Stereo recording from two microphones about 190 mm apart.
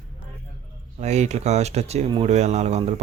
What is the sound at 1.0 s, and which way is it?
Speech, 35° right (ahead or behind).